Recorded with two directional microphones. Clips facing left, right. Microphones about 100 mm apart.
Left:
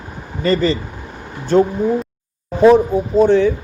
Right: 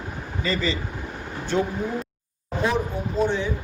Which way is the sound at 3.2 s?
55° left (ahead or behind).